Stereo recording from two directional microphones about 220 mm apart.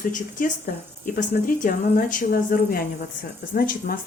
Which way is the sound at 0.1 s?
35° left (ahead or behind).